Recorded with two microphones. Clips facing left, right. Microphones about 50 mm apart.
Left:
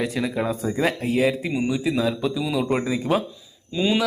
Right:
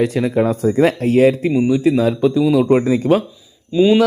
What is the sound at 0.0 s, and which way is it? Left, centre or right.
A man's voice, centre.